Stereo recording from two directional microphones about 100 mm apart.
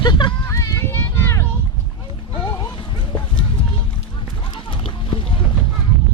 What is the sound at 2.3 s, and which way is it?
Music, 30° left (ahead or behind).